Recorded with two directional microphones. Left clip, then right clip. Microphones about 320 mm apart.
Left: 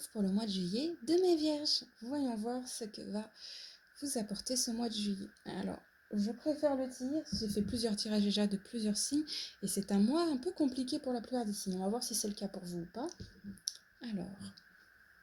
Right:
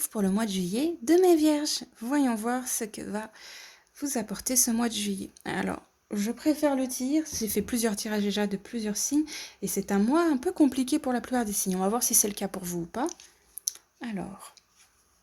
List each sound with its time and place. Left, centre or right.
0.2 s a woman's voice: right
14.0 s speech: centre